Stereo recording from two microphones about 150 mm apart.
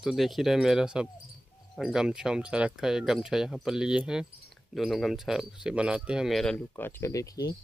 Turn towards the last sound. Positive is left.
turn(degrees=25)  # may be behind; listen again after turning